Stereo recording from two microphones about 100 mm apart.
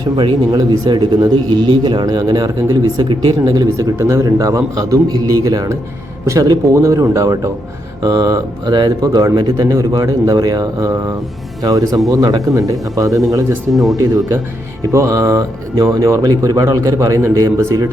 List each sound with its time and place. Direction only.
0.5 s a man's voice: 40° right (ahead or behind)
10.8 s speech: 30° right (ahead or behind)